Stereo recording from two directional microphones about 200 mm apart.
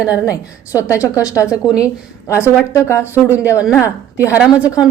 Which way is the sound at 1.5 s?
5° right (ahead or behind).